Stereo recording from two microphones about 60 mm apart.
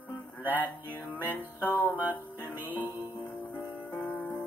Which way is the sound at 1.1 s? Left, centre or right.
Left.